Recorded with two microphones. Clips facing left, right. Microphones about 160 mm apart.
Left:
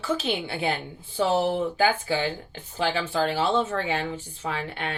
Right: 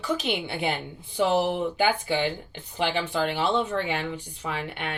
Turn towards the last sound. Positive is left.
turn(degrees=-15)  # may be behind; listen again after turning